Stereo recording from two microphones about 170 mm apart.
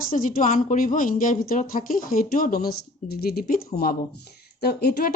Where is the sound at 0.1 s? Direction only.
50° left (ahead or behind).